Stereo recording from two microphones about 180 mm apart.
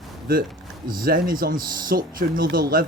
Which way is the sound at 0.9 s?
50° right (ahead or behind).